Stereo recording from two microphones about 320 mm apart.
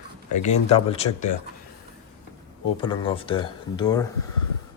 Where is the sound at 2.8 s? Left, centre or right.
Centre.